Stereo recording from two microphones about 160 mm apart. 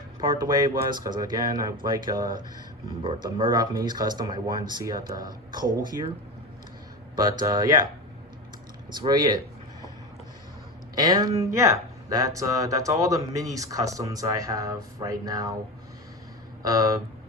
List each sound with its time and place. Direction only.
0.3 s speech: 25° right (ahead or behind)
7.3 s speech: 25° right (ahead or behind)
9.0 s speech: 25° right (ahead or behind)
10.9 s speech: 25° right (ahead or behind)
16.6 s speech: 20° right (ahead or behind)